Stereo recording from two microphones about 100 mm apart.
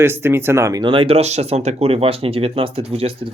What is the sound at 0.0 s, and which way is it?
Speech, 25° right (ahead or behind).